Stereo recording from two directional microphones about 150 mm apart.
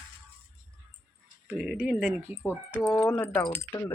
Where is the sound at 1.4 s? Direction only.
5° right (ahead or behind).